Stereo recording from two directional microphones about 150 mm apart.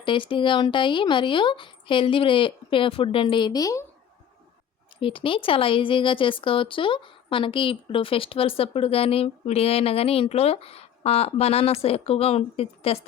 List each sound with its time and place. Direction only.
0.0 s speech: 35° left (ahead or behind)
4.9 s speech: 35° left (ahead or behind)